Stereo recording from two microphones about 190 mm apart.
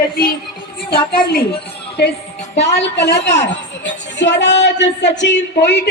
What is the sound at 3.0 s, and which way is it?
A woman's voice, 65° left (ahead or behind).